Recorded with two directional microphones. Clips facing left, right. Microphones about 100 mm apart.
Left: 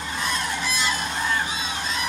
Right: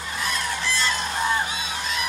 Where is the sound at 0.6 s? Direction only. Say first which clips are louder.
Right 1 dB; 15° left (ahead or behind).